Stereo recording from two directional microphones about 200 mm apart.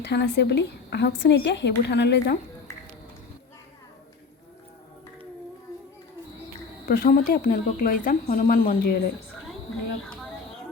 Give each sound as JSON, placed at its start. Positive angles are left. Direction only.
{"t": 0.0, "sound": "a woman's voice", "side_deg": 55}
{"t": 6.8, "sound": "speech", "side_deg": 50}